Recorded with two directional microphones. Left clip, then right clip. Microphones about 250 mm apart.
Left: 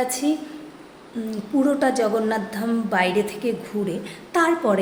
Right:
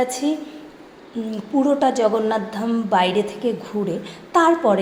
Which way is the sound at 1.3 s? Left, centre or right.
Centre.